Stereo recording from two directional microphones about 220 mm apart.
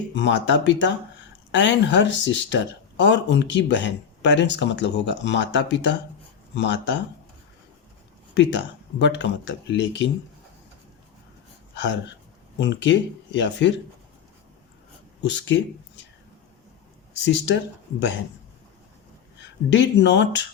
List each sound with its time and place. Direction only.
0.1 s speech: 55° left (ahead or behind)
8.4 s speech: 55° left (ahead or behind)
11.7 s speech: 55° left (ahead or behind)
15.2 s speech: 55° left (ahead or behind)
17.2 s speech: 55° left (ahead or behind)
19.7 s speech: 55° left (ahead or behind)